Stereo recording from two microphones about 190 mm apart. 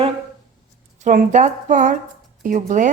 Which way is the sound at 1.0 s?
40° right (ahead or behind).